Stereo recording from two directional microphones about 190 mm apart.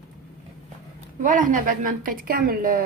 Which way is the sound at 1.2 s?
45° right (ahead or behind).